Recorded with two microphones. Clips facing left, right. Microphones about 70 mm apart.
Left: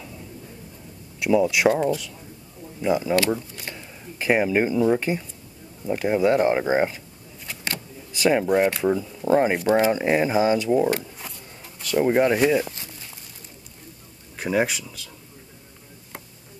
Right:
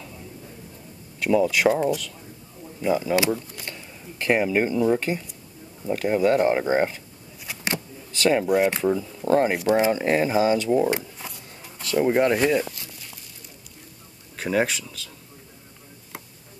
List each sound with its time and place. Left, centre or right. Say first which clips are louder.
1.2 s speech: left 1 dB; centre
2.8 s speech: left 1 dB; centre
7.4 s a sound: right 3 dB; centre
8.1 s speech: left 1 dB; centre
11.2 s zipper: right 1 dB; centre
14.3 s speech: even; centre